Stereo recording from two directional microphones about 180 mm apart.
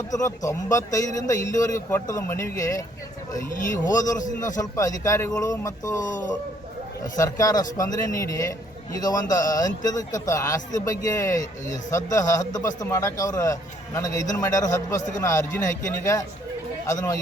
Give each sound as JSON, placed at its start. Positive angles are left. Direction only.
{"t": 0.1, "sound": "a man's voice", "side_deg": 20}
{"t": 4.5, "sound": "a man's voice", "side_deg": 20}
{"t": 7.0, "sound": "a man's voice", "side_deg": 20}